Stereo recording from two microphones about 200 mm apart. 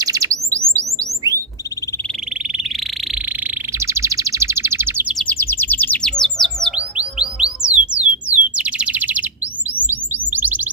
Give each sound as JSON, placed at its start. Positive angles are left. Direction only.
{"t": 0.0, "sound": "bird", "side_deg": -15}
{"t": 3.4, "sound": "chirp", "side_deg": -15}
{"t": 5.3, "sound": "chirp", "side_deg": 10}
{"t": 10.3, "sound": "chirp tone", "side_deg": -10}